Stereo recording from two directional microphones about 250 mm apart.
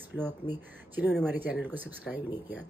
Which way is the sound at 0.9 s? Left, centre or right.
Centre.